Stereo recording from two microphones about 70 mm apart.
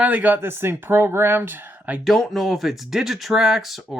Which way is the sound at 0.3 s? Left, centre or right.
Right.